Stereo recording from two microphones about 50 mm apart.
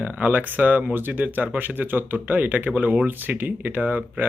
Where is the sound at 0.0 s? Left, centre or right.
Right.